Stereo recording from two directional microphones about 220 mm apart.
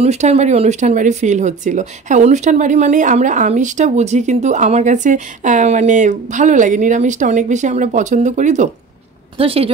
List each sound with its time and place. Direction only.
0.0 s a woman's voice: 30° right (ahead or behind)